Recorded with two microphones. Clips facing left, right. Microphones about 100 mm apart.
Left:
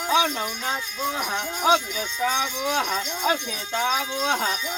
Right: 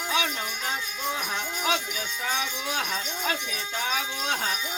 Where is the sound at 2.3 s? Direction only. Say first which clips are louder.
Left 5 dB; 25° left (ahead or behind).